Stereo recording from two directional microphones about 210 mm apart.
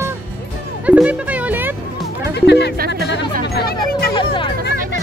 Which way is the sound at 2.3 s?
55° left (ahead or behind).